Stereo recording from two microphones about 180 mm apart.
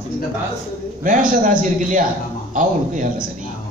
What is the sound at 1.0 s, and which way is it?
A man's voice, 50° right (ahead or behind).